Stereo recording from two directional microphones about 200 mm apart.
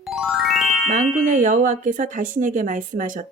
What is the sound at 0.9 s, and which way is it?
Speech, 40° right (ahead or behind).